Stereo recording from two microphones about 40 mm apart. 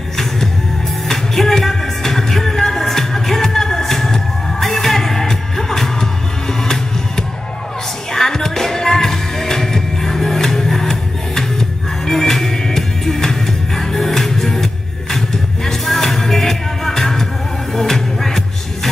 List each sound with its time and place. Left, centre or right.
1.0 s music: centre
8.1 s music: centre